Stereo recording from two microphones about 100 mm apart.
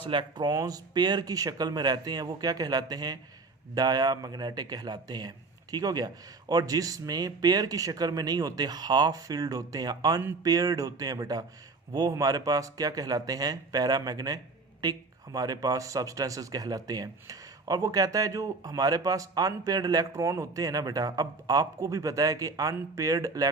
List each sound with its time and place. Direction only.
0.0 s speech: 55° right (ahead or behind); by 23.5 s 35° right (ahead or behind)